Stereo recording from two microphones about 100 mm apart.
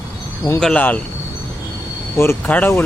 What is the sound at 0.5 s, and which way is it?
Speech, 10° left (ahead or behind).